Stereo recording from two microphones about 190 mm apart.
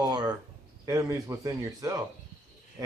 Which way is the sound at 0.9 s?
15° right (ahead or behind).